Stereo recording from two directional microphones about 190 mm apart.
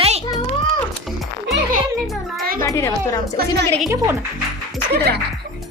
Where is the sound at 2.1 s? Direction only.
Centre (ahead or behind).